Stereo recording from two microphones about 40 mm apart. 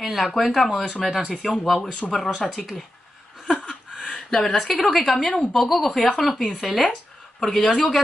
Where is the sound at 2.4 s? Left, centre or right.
Centre.